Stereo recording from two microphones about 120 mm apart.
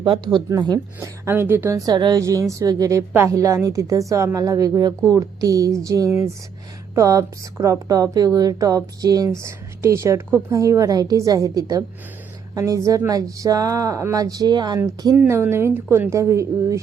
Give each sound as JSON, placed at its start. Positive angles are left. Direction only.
{"t": 0.0, "sound": "a woman's voice", "side_deg": -40}
{"t": 14.8, "sound": "a woman's voice", "side_deg": -25}